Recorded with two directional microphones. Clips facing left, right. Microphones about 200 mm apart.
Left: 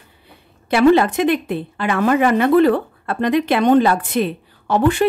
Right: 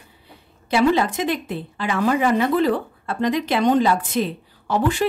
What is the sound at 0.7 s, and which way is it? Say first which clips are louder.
A woman's voice: left 5 dB; 60° left (ahead or behind).